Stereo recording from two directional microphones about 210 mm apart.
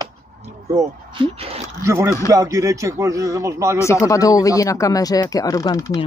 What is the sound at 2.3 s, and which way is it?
A man's voice, 15° right (ahead or behind).